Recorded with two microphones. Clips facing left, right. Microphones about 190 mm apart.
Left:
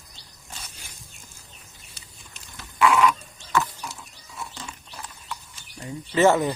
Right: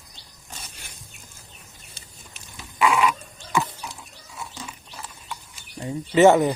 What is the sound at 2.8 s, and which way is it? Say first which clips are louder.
Pig: left 1 dB; 10° right (ahead or behind).